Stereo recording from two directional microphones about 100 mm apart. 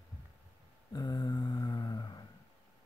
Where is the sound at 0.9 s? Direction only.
40° left (ahead or behind).